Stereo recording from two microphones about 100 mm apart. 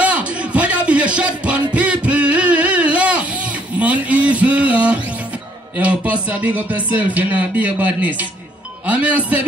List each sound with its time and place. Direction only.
0.0 s music: 10° right (ahead or behind)
5.8 s speech: 15° right (ahead or behind)